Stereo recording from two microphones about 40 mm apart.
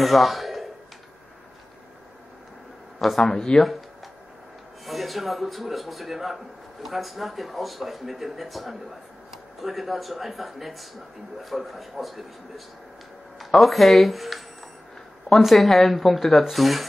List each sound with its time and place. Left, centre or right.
0.0 s a sound: centre
3.0 s speech: centre
3.3 s speech: centre
4.8 s a man's voice: centre